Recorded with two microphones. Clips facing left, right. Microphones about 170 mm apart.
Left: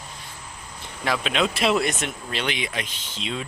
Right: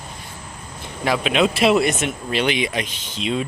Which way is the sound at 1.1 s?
10° right (ahead or behind).